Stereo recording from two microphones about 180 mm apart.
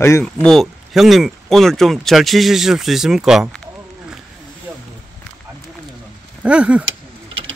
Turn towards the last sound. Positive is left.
turn(degrees=-5)  # may be behind; listen again after turning